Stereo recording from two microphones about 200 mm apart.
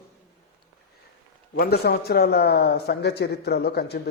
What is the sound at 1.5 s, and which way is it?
A man's voice, 50° left (ahead or behind).